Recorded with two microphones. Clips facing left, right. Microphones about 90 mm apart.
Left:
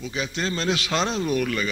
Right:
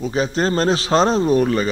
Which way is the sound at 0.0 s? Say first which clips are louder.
Right 9 dB; 40° right (ahead or behind).